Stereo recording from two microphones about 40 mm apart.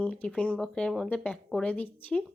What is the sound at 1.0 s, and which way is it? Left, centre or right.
Speech, left.